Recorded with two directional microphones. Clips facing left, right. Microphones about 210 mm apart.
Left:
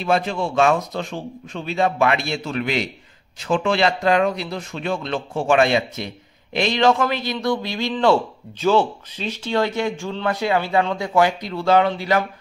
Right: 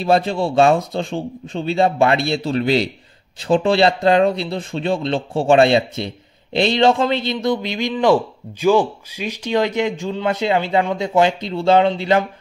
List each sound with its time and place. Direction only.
0.0 s a man's voice: 35° right (ahead or behind)